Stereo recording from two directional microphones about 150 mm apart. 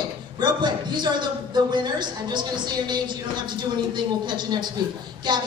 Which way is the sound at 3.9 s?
30° right (ahead or behind).